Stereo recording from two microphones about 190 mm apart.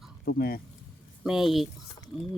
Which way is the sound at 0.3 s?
50° left (ahead or behind).